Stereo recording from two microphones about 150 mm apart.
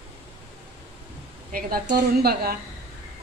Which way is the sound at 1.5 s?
75° right (ahead or behind).